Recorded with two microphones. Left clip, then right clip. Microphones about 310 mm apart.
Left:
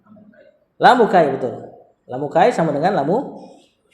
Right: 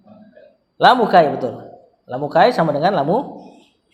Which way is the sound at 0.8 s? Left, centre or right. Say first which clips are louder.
Even; right.